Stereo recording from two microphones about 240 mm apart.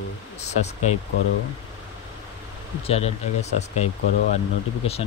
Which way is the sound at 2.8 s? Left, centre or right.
Left.